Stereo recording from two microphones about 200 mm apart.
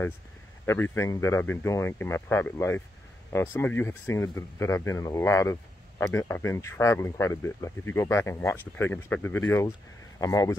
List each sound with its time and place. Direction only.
0.7 s speech: 10° left (ahead or behind)